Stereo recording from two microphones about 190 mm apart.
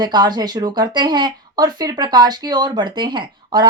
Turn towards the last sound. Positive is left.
turn(degrees=-25)  # may be behind; listen again after turning